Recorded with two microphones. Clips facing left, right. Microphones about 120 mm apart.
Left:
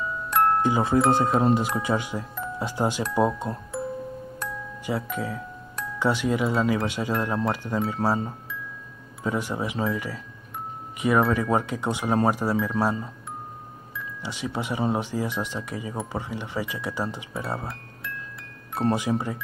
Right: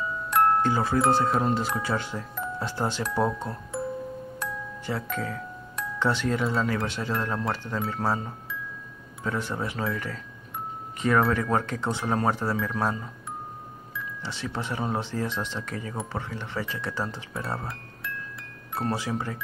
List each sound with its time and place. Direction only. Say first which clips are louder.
0.3 s music: even; centre (ahead or behind)
0.6 s speech: left 2 dB; 15° left (ahead or behind)
5.0 s speech: left 1 dB; 10° left (ahead or behind)
9.2 s speech: left 2 dB; 15° left (ahead or behind)
12.8 s speech: left 3 dB; 25° left (ahead or behind)
14.2 s speech: left 3 dB; 15° left (ahead or behind)
18.8 s speech: left 5 dB; 15° left (ahead or behind)